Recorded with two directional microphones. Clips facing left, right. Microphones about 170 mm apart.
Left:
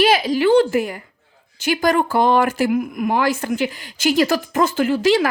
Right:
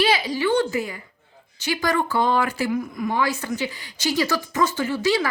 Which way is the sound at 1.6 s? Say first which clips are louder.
Left 5 dB; 50° left (ahead or behind).